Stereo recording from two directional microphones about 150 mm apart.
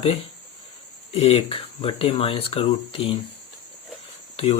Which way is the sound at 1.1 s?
40° left (ahead or behind).